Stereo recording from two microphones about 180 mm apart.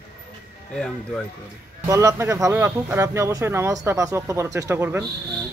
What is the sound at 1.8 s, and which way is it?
Speech, 15° right (ahead or behind).